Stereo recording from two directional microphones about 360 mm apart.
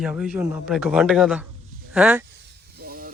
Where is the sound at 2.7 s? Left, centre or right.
Right.